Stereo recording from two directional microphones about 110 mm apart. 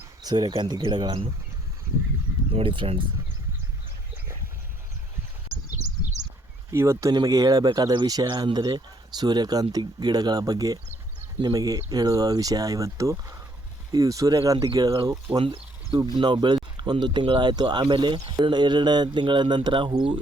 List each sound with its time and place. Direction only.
0.2 s speech: 40° right (ahead or behind)
2.5 s speech: 50° right (ahead or behind)
5.7 s a sound: 90° right
6.7 s speech: 25° right (ahead or behind)
15.4 s a sound: 50° right (ahead or behind)
16.1 s speech: 45° right (ahead or behind)